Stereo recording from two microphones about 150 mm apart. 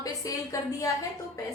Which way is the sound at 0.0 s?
25° left (ahead or behind).